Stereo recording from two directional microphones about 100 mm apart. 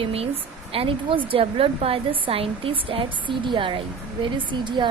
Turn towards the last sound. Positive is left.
turn(degrees=-55)  # may be behind; listen again after turning